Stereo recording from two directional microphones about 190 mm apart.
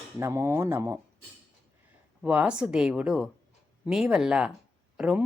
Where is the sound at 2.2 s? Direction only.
5° right (ahead or behind).